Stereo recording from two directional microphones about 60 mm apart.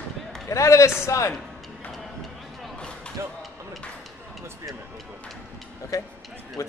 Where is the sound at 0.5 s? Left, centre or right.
Left.